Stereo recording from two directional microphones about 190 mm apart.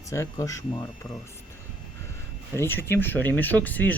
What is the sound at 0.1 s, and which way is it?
Speech, 15° left (ahead or behind).